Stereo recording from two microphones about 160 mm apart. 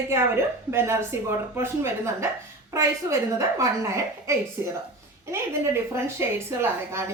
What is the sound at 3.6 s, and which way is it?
Speech, 20° right (ahead or behind).